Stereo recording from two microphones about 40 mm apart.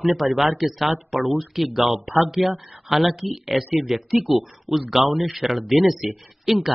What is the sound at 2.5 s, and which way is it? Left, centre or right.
Speech, right.